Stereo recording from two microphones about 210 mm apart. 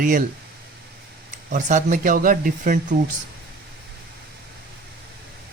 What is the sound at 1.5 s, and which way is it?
Speech, 35° right (ahead or behind).